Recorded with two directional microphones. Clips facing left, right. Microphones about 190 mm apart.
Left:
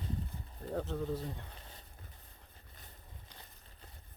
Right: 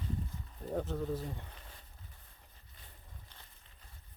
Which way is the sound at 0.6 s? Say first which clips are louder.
Right 1 dB; 10° right (ahead or behind).